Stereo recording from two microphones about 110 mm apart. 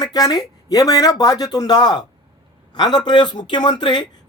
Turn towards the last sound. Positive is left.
turn(degrees=45)  # may be behind; listen again after turning